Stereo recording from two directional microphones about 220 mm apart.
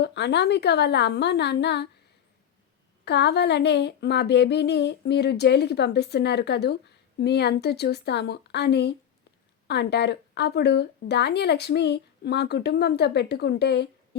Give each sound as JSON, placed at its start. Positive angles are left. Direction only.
{"t": 0.0, "sound": "speech", "side_deg": 50}
{"t": 3.0, "sound": "speech", "side_deg": 50}